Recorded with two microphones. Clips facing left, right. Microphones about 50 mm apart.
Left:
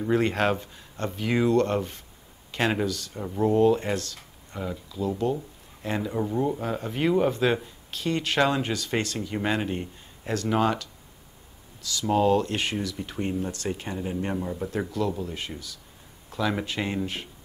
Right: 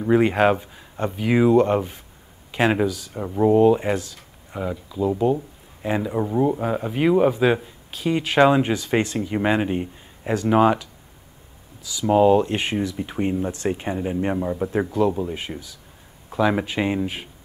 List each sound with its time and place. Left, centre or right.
0.0 s speech: centre